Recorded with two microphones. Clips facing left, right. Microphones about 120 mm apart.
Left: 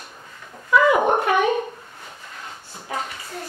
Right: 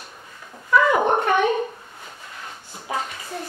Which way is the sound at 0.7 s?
5° left (ahead or behind).